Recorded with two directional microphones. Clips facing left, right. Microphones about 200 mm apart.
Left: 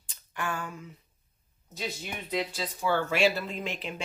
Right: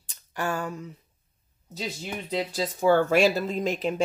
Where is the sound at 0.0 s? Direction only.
40° right (ahead or behind).